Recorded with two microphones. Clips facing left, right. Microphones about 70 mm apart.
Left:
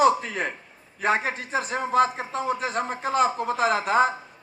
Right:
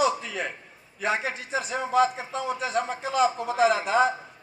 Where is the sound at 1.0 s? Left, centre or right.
Left.